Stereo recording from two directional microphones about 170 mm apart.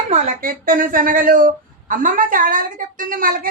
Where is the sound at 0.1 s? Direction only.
50° right (ahead or behind).